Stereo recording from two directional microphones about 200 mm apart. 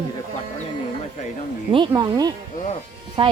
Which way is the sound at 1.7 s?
20° right (ahead or behind).